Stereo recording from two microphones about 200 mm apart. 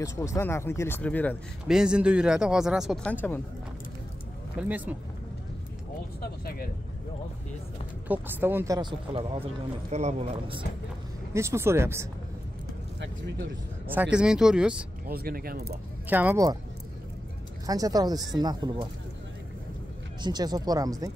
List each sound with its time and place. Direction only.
0.0 s speech: 15° left (ahead or behind)
4.6 s speech: 10° right (ahead or behind)
6.2 s speech: 50° left (ahead or behind)
8.1 s speech: 10° right (ahead or behind)
9.8 s speech: 35° right (ahead or behind)
11.3 s speech: 15° right (ahead or behind)
14.1 s speech: 5° right (ahead or behind)
15.0 s speech: 50° right (ahead or behind)
16.1 s speech: 10° right (ahead or behind)
17.6 s speech: 20° right (ahead or behind)
20.2 s speech: 20° right (ahead or behind)